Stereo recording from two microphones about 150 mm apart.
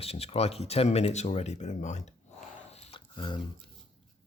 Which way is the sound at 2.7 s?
45° left (ahead or behind).